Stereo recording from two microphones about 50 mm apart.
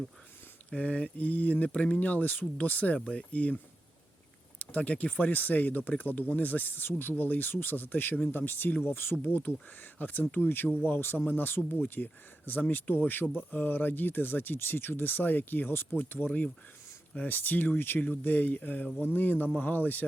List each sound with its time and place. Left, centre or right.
0.8 s speech: left
4.6 s speech: left
18.2 s speech: left